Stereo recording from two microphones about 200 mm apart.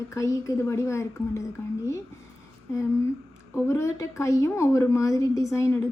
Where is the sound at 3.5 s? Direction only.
15° left (ahead or behind).